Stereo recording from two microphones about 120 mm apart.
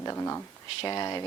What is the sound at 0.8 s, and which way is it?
Speech, 35° left (ahead or behind).